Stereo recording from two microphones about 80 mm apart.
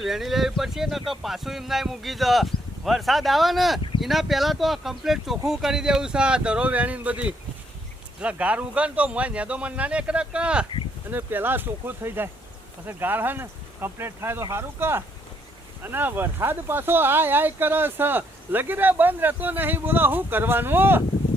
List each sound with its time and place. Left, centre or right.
0.0 s a man's voice: centre
11.1 s speech: right